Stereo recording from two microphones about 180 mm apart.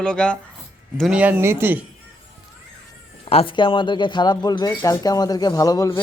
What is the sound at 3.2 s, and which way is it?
Speech, 30° left (ahead or behind).